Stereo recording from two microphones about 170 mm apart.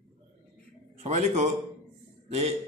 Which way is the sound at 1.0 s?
40° right (ahead or behind).